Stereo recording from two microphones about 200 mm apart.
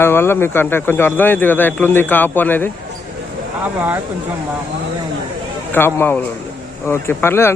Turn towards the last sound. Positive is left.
turn(degrees=10)  # may be behind; listen again after turning